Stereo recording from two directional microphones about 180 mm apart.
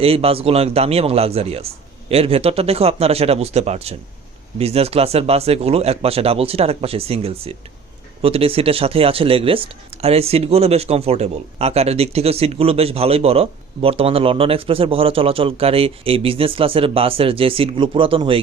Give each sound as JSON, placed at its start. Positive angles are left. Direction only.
{"t": 0.0, "sound": "speech", "side_deg": -30}